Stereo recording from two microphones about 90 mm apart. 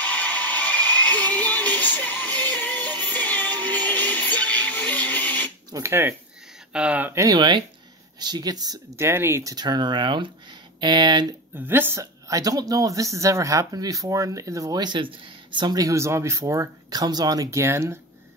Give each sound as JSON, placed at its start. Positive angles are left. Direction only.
{"t": 0.0, "sound": "a sound", "side_deg": 20}
{"t": 1.0, "sound": "music", "side_deg": 20}
{"t": 5.7, "sound": "a woman's voice", "side_deg": -35}
{"t": 6.7, "sound": "speech", "side_deg": -15}
{"t": 7.3, "sound": "speech", "side_deg": -55}
{"t": 8.9, "sound": "speech", "side_deg": -30}
{"t": 11.5, "sound": "a woman's voice", "side_deg": -25}
{"t": 16.9, "sound": "a woman's voice", "side_deg": -45}